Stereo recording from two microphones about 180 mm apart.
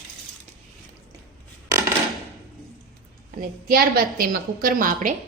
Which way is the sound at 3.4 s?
55° right (ahead or behind).